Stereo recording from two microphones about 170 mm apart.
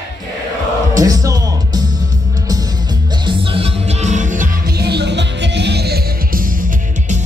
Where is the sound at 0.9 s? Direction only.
20° right (ahead or behind).